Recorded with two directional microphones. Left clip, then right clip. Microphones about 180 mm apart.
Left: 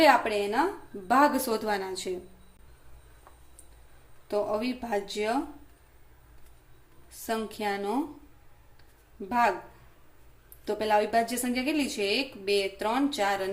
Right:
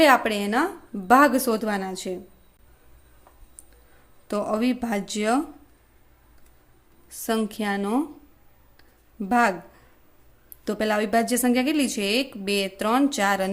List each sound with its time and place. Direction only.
0.0 s a woman's voice: 45° right (ahead or behind)
4.3 s speech: 50° right (ahead or behind)
7.3 s a woman's voice: 40° right (ahead or behind)
9.3 s speech: 45° right (ahead or behind)
10.7 s speech: 45° right (ahead or behind)